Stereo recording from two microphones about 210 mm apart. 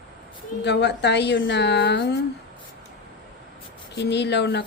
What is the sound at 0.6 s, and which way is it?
A woman's voice, 55° left (ahead or behind).